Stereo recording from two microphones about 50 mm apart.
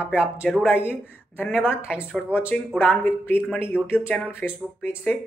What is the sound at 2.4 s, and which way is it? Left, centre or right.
Speech, left.